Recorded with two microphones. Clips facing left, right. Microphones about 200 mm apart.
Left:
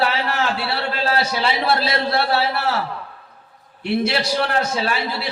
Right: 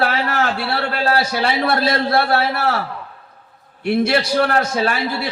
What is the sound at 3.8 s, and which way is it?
A man's voice, 50° right (ahead or behind).